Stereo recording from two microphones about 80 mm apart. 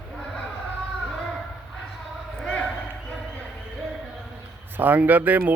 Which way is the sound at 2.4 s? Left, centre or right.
Centre.